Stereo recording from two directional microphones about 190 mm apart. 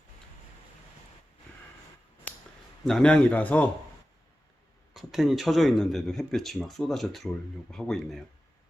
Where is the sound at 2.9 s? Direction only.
5° left (ahead or behind).